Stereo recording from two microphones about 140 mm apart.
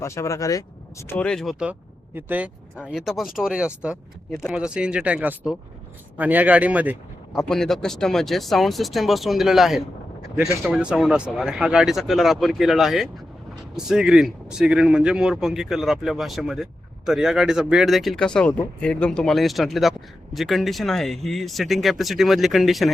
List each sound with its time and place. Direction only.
0.0 s speech: 20° left (ahead or behind)
1.1 s speech: 5° left (ahead or behind)
7.3 s speech: 5° left (ahead or behind)